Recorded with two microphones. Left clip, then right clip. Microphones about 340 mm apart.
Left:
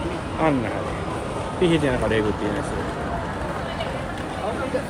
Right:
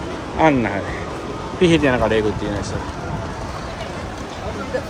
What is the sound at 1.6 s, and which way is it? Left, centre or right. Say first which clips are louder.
Speech: right 6 dB; centre.